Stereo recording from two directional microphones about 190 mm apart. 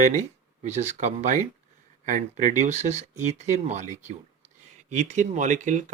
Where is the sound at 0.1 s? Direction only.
40° right (ahead or behind).